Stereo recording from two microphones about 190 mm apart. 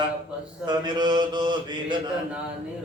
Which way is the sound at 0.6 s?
25° right (ahead or behind).